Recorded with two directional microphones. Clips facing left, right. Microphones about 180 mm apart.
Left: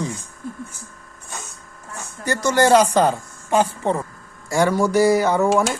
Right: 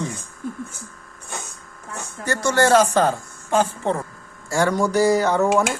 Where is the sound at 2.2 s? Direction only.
15° left (ahead or behind).